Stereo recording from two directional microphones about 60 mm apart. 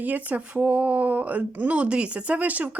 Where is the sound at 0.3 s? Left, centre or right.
Right.